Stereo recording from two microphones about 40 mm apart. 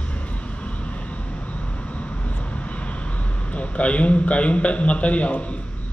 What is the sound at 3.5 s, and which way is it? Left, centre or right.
A man's voice, left.